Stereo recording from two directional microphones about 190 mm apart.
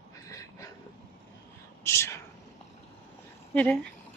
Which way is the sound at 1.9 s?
15° left (ahead or behind).